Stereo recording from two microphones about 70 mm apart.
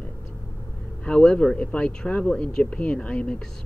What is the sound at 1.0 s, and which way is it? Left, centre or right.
Speech, centre.